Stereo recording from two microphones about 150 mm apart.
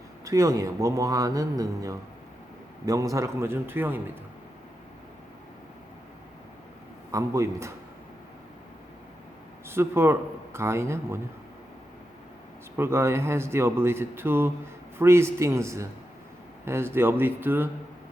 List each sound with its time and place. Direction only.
0.3 s a man's voice: 20° right (ahead or behind)
7.1 s a man's voice: 20° right (ahead or behind)
9.6 s speech: 15° right (ahead or behind)
12.7 s speech: 15° right (ahead or behind)